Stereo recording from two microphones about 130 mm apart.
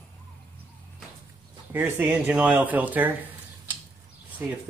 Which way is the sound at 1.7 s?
15° right (ahead or behind).